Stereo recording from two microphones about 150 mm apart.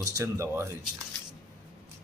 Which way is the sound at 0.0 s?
20° right (ahead or behind).